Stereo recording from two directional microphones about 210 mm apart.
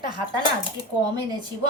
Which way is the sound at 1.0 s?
20° right (ahead or behind).